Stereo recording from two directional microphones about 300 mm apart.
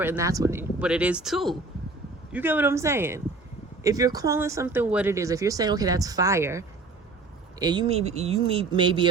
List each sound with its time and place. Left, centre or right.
0.0 s speech: centre